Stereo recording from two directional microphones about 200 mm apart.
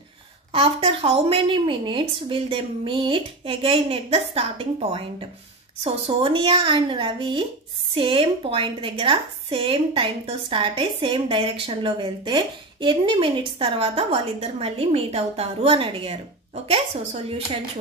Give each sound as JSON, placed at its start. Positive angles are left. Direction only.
{"t": 0.5, "sound": "a woman's voice", "side_deg": -30}